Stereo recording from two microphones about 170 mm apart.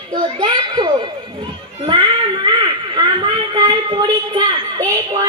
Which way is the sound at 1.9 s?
30° right (ahead or behind).